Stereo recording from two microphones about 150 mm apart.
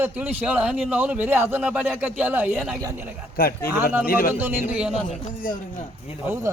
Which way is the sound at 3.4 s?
90° left.